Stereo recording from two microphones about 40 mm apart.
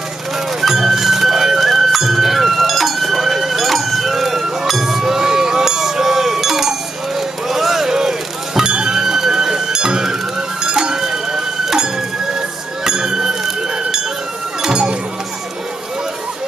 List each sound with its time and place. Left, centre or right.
0.6 s music: centre
10.6 s a sound: centre
12.4 s music: centre